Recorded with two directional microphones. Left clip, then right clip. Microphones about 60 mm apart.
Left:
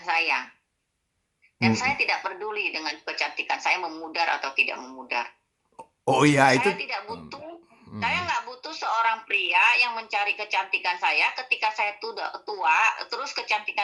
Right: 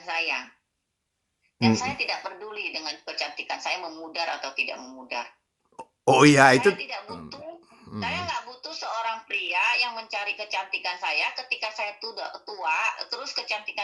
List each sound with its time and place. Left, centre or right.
0.0 s a sound: centre
1.5 s speech: centre
5.7 s plop: right
6.7 s speech: centre